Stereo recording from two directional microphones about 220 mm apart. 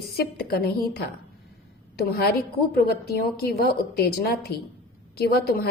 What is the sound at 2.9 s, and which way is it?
A woman's voice, 45° left (ahead or behind).